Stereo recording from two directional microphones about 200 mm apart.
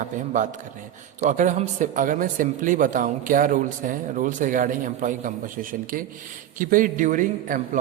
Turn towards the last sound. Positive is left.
turn(degrees=-40)  # may be behind; listen again after turning